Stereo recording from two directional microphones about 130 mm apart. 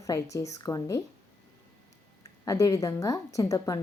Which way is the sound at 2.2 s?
25° left (ahead or behind).